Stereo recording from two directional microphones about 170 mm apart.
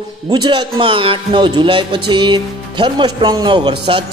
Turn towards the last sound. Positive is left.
turn(degrees=-30)  # may be behind; listen again after turning